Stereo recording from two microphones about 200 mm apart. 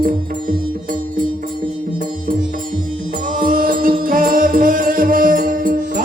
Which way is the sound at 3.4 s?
45° right (ahead or behind).